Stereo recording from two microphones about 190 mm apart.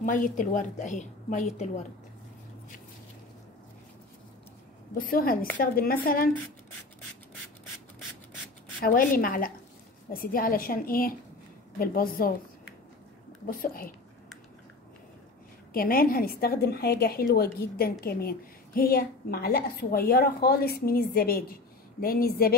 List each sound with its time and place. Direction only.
0.0 s a woman's voice: 45° left (ahead or behind)
4.9 s a woman's voice: 50° left (ahead or behind)
8.8 s a woman's voice: 50° left (ahead or behind)
13.5 s a woman's voice: 50° left (ahead or behind)
15.7 s a woman's voice: 50° left (ahead or behind)